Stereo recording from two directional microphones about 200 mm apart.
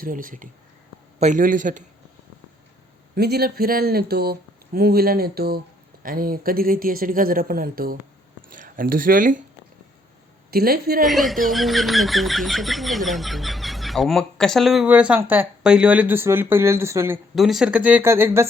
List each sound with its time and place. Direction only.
0.0 s a man's voice: 45° right (ahead or behind)
3.2 s speech: 50° right (ahead or behind)
10.5 s speech: 50° right (ahead or behind)
11.0 s speech: centre (ahead or behind)
17.3 s speech: centre (ahead or behind)